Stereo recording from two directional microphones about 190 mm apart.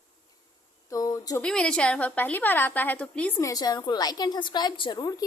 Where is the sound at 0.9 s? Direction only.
20° left (ahead or behind).